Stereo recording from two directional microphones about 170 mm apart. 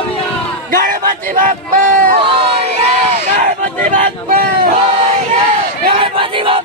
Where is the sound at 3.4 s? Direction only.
50° right (ahead or behind).